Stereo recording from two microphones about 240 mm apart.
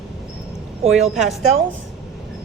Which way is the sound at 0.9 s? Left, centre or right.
Centre.